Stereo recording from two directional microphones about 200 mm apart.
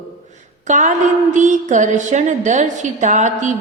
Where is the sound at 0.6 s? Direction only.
35° right (ahead or behind).